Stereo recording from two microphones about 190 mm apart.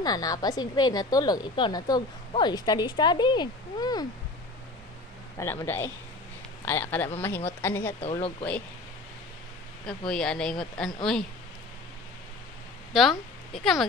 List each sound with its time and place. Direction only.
0.0 s a woman's voice: 20° left (ahead or behind)
5.4 s a man's voice: 10° left (ahead or behind)
8.0 s speech: 30° left (ahead or behind)
9.8 s speech: 5° left (ahead or behind)
12.9 s a woman's voice: centre (ahead or behind)